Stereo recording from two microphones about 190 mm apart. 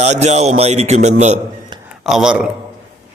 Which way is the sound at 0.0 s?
35° right (ahead or behind).